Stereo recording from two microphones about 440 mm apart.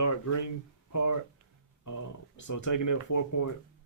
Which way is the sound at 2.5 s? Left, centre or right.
Left.